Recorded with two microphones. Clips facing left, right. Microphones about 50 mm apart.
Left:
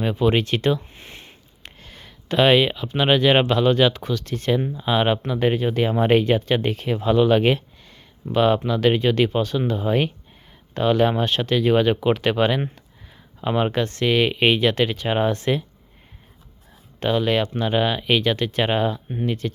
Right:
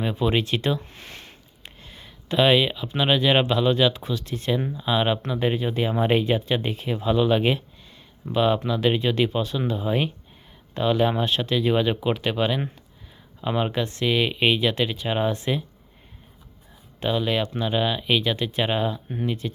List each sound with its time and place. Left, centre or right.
0.0 s speech: left
0.8 s a sound: left
1.6 s speech: left
12.1 s speech: left
13.4 s speech: left
13.7 s speech: left
17.0 s speech: left